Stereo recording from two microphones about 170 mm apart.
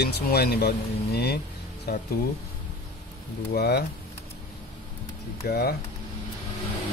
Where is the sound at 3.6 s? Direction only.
75° left (ahead or behind).